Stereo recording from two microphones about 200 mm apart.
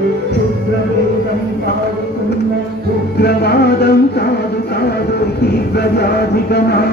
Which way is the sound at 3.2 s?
55° left (ahead or behind).